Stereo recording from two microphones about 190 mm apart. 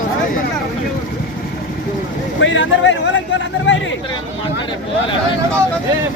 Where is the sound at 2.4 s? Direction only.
80° left.